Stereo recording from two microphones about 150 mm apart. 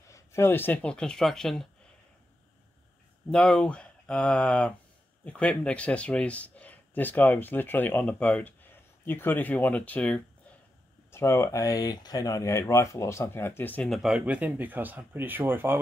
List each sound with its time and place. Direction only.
0.1 s speech: 15° left (ahead or behind)
3.3 s speech: 5° left (ahead or behind)
13.8 s speech: centre (ahead or behind)